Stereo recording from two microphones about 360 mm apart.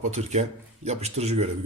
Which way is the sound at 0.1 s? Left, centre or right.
Centre.